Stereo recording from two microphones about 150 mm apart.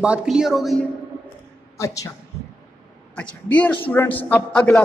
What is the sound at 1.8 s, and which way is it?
Speech, 20° left (ahead or behind).